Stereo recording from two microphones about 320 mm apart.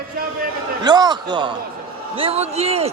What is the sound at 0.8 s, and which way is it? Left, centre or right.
A man's voice, centre.